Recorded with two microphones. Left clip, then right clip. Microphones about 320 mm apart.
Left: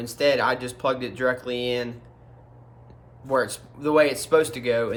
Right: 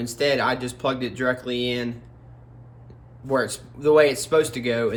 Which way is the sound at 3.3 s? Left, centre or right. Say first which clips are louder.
Even; centre.